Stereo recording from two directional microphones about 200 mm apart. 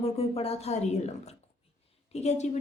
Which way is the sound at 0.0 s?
30° left (ahead or behind).